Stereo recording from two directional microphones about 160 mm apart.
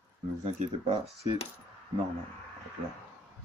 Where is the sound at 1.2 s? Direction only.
40° left (ahead or behind).